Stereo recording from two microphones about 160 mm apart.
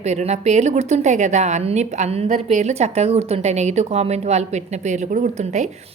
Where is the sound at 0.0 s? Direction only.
45° right (ahead or behind).